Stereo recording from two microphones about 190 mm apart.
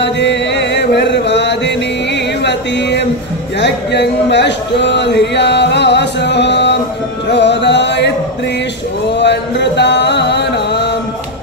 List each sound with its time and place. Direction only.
0.0 s mantra: 65° left (ahead or behind)
2.4 s music: 65° left (ahead or behind)
3.5 s speech: 65° left (ahead or behind)
7.2 s music: 65° left (ahead or behind)
9.1 s music: 65° left (ahead or behind)